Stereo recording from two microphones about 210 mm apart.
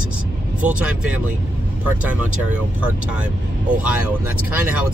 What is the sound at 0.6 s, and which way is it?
Speech, 5° right (ahead or behind).